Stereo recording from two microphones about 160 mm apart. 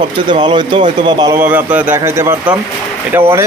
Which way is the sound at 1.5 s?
10° right (ahead or behind).